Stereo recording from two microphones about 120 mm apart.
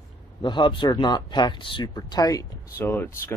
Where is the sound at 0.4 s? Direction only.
40° left (ahead or behind).